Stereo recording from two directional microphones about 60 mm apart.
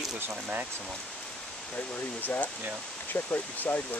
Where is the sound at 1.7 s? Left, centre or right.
Left.